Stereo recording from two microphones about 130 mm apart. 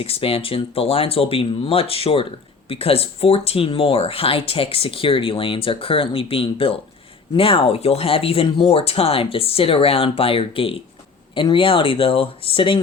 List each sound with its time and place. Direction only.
0.0 s speech: 45° left (ahead or behind)